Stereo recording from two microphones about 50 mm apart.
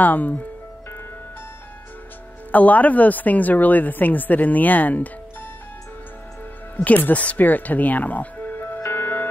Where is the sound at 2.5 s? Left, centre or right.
Left.